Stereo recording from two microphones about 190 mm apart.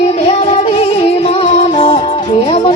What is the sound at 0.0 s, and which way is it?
Music, 30° left (ahead or behind).